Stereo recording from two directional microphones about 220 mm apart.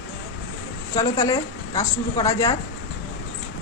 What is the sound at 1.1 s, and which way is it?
Speech, 15° left (ahead or behind).